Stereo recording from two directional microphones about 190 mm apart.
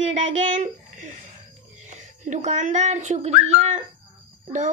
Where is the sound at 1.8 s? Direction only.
40° right (ahead or behind).